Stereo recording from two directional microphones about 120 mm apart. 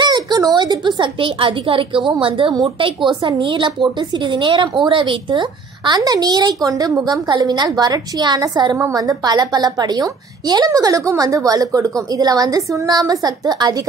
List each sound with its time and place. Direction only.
0.0 s a child's voice: 35° right (ahead or behind)
8.7 s a woman's voice: 25° right (ahead or behind)